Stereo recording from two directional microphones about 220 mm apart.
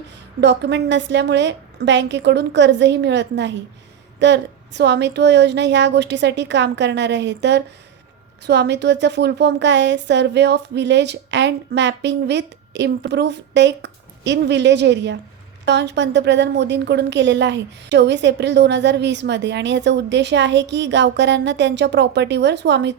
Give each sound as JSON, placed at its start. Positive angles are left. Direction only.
{"t": 0.4, "sound": "a woman's voice", "side_deg": -50}